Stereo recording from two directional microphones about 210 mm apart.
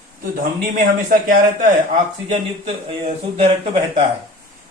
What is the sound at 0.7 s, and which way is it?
Speech, 40° right (ahead or behind).